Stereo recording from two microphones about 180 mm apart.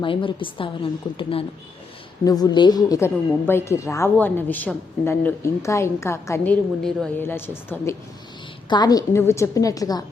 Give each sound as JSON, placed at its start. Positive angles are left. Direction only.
{"t": 0.0, "sound": "a woman's voice", "side_deg": 30}